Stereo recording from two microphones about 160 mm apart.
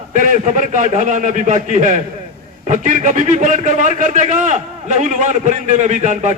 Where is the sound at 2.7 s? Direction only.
55° right (ahead or behind).